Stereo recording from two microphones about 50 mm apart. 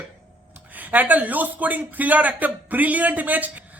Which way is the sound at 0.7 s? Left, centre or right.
Right.